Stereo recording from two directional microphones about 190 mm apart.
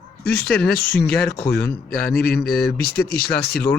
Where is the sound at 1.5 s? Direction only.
5° left (ahead or behind).